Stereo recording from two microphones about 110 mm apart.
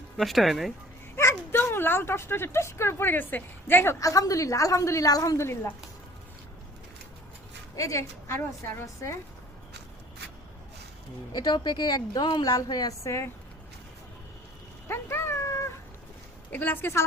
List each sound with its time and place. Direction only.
0.2 s speech: centre (ahead or behind)
1.1 s speech: 25° left (ahead or behind)
4.0 s a woman's voice: 30° left (ahead or behind)
7.8 s a woman's voice: 30° left (ahead or behind)
11.3 s a woman's voice: 40° left (ahead or behind)
14.8 s cat: 20° left (ahead or behind)
16.5 s a woman's voice: 20° left (ahead or behind)